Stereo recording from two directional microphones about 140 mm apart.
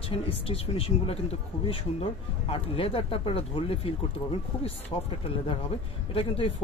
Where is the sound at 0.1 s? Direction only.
40° left (ahead or behind).